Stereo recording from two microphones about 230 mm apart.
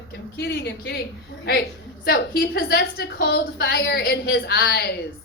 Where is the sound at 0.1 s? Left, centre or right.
Left.